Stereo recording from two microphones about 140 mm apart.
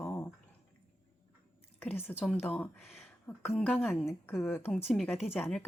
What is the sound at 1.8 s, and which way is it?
Speech, 15° left (ahead or behind).